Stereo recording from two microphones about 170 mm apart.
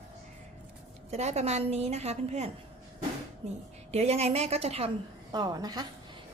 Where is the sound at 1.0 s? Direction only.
40° right (ahead or behind).